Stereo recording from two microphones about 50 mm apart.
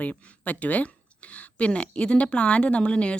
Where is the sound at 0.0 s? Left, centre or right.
Left.